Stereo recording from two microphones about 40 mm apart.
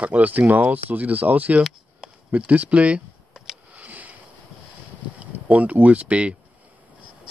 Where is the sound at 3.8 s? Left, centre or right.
Right.